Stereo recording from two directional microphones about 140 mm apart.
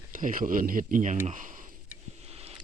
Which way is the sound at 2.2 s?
45° right (ahead or behind).